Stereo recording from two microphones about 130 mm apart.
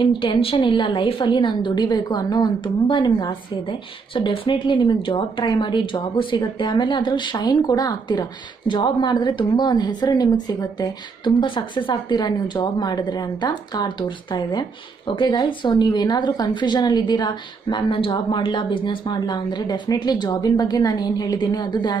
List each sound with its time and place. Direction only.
0.0 s a woman's voice: 40° left (ahead or behind)